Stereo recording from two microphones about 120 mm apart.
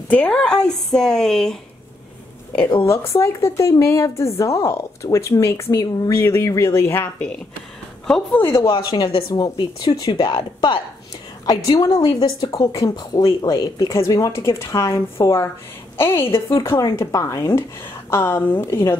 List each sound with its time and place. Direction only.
0.1 s speech: 10° left (ahead or behind)
3.1 s a woman's voice: 25° left (ahead or behind)
8.6 s a woman's voice: 35° left (ahead or behind)
12.0 s a woman's voice: 35° left (ahead or behind)
12.7 s a woman's voice: 30° left (ahead or behind)